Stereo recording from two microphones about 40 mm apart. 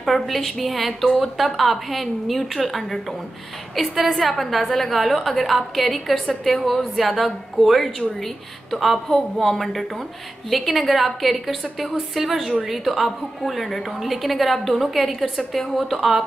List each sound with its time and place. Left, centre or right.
0.0 s a woman's voice: centre